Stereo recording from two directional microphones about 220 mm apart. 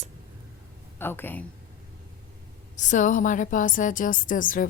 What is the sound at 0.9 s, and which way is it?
Speech, 10° left (ahead or behind).